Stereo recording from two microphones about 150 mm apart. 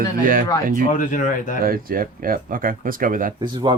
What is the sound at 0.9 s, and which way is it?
Speech, 60° left (ahead or behind).